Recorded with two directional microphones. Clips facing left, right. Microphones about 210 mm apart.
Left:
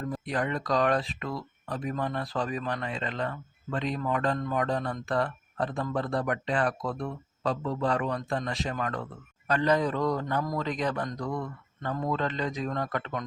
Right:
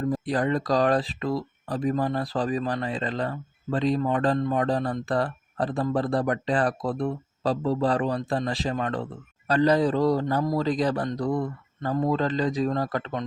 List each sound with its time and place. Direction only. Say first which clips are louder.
0.1 s speech: right 4 dB; 35° right (ahead or behind)